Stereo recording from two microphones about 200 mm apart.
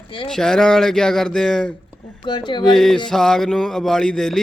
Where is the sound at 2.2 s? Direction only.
25° left (ahead or behind).